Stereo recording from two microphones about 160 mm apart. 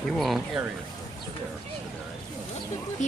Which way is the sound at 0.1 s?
Centre (ahead or behind).